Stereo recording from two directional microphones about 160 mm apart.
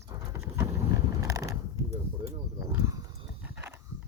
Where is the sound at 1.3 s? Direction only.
20° right (ahead or behind).